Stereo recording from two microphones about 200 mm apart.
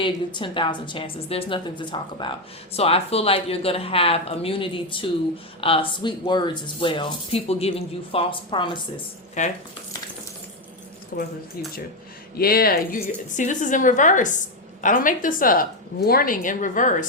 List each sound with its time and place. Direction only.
0.0 s speech: 25° left (ahead or behind)
9.4 s a woman's voice: 40° left (ahead or behind)
11.1 s speech: 45° left (ahead or behind)
12.4 s a woman's voice: 50° left (ahead or behind)